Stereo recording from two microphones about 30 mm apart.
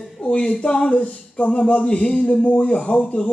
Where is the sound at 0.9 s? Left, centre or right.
Left.